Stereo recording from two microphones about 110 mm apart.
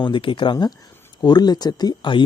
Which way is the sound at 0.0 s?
50° left (ahead or behind).